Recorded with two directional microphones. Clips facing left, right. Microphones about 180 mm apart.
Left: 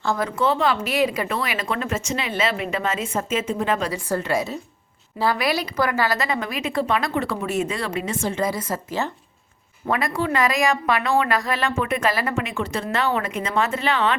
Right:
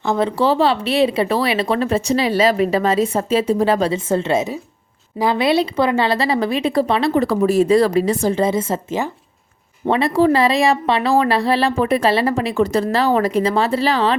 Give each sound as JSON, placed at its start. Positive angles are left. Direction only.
{"t": 0.0, "sound": "speech", "side_deg": -25}
{"t": 8.4, "sound": "speech", "side_deg": -25}